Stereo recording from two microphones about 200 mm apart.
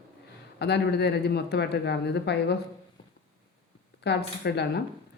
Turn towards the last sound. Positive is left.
turn(degrees=55)  # may be behind; listen again after turning